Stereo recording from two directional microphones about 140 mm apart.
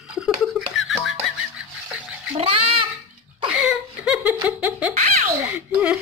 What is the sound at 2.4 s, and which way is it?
Speech, 40° right (ahead or behind).